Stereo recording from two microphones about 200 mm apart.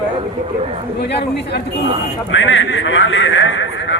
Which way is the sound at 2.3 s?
70° left (ahead or behind).